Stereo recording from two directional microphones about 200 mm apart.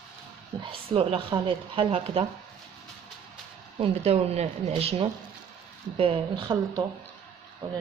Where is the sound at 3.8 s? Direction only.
30° right (ahead or behind).